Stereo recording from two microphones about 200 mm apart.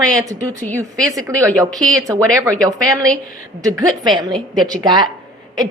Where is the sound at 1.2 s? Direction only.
15° right (ahead or behind).